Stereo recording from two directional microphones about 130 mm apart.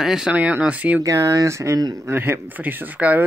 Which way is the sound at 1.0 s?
25° right (ahead or behind).